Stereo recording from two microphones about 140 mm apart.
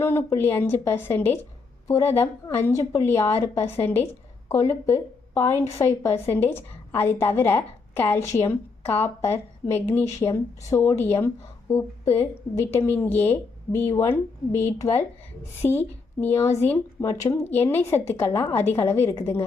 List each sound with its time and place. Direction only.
0.0 s a woman's voice: 20° left (ahead or behind)